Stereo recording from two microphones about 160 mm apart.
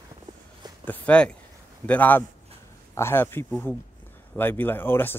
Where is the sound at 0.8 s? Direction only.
10° left (ahead or behind).